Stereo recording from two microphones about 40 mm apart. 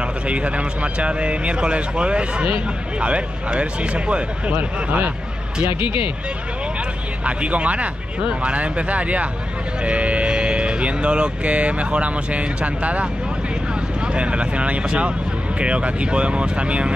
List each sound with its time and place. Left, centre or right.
0.0 s speech: right
4.6 s speech: right
7.2 s speech: right